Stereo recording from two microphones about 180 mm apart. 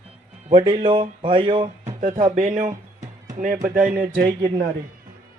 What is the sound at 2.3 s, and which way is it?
A man's voice, 45° right (ahead or behind).